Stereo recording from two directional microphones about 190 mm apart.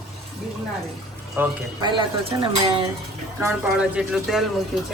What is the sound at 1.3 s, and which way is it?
Speech, 20° right (ahead or behind).